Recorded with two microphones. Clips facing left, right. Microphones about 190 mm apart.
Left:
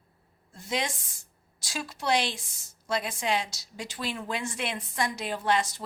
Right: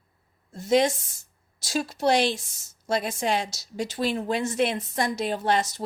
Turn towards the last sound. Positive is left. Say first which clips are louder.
# right 3 dB
turn(degrees=-40)  # may be behind; listen again after turning